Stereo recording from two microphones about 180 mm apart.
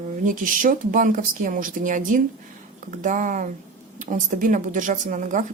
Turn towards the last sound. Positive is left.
turn(degrees=-45)  # may be behind; listen again after turning